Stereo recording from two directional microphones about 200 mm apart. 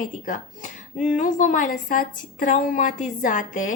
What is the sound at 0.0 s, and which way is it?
A woman's voice, 40° left (ahead or behind).